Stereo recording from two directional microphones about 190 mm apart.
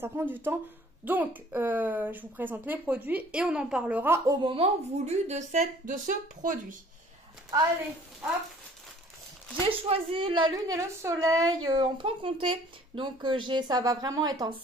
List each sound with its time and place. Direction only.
0.0 s speech: 10° right (ahead or behind)
4.4 s a woman's voice: 30° right (ahead or behind); by 6.8 s 45° right (ahead or behind)
9.7 s a woman's voice: 30° right (ahead or behind)